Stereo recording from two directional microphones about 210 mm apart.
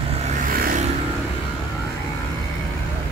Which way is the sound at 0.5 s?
45° right (ahead or behind).